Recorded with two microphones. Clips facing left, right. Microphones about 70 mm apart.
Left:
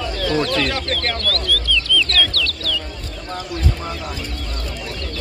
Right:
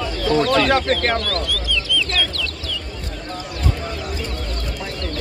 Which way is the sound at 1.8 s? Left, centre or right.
Centre.